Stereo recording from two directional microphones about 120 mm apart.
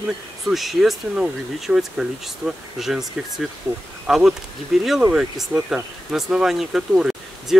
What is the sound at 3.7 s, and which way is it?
Speech, 15° right (ahead or behind).